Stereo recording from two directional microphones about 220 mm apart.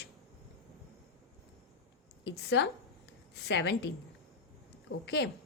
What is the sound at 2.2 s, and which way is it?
Speech, 50° left (ahead or behind).